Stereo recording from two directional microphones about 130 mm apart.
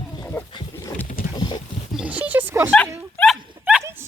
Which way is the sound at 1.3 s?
35° left (ahead or behind).